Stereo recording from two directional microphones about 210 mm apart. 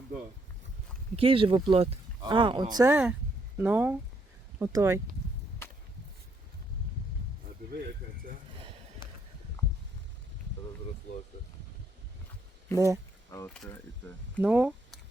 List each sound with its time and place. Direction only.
1.1 s speech: 25° right (ahead or behind)
7.8 s a sound: 45° right (ahead or behind)
12.7 s speech: 15° right (ahead or behind)
14.4 s speech: 5° right (ahead or behind)